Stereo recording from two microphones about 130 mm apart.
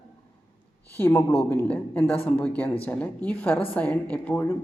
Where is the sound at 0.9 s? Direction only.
15° left (ahead or behind).